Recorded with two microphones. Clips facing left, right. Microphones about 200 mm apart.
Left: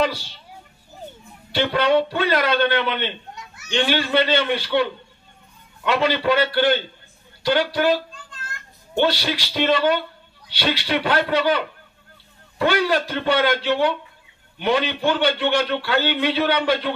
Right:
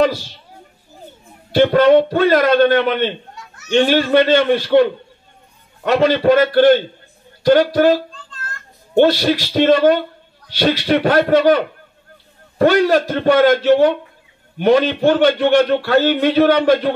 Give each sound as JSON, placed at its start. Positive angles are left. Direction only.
{"t": 0.0, "sound": "speech", "side_deg": -45}
{"t": 1.5, "sound": "a man's voice", "side_deg": -45}